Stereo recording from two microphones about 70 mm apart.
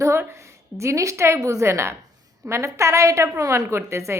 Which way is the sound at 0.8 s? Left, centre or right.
Right.